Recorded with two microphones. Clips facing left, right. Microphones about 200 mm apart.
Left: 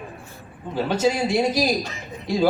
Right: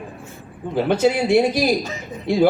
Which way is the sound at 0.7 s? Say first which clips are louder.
Right 4 dB; 60° right (ahead or behind).